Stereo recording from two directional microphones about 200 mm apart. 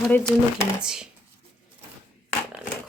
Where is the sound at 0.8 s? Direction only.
5° right (ahead or behind).